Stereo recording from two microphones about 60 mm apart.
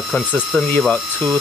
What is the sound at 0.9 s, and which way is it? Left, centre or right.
Speech, centre.